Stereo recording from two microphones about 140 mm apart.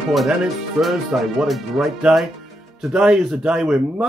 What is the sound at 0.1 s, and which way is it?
Speech, centre (ahead or behind).